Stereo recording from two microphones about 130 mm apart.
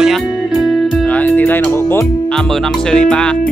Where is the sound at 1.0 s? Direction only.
10° left (ahead or behind).